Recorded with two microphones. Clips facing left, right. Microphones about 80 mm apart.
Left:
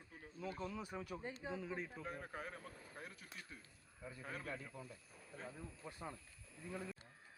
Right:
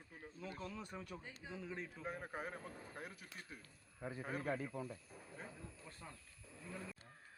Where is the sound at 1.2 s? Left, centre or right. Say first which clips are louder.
Left 6 dB; left.